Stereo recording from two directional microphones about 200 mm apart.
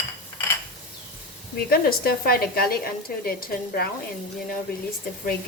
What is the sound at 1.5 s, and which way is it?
A woman's voice, 50° left (ahead or behind).